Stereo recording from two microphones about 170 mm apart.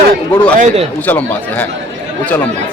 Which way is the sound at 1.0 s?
10° left (ahead or behind).